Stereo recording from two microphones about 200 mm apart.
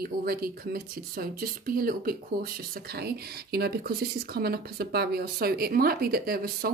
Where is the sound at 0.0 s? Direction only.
50° right (ahead or behind).